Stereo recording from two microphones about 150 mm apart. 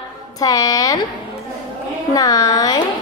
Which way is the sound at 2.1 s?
25° left (ahead or behind).